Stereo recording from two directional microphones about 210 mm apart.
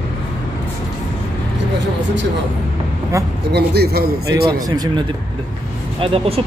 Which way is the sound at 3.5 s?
50° right (ahead or behind).